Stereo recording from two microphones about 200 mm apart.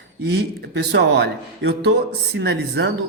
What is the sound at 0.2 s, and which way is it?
A man's voice, 60° right (ahead or behind).